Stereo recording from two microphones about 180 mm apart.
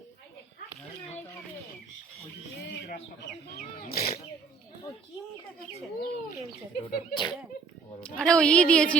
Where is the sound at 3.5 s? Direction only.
60° left (ahead or behind).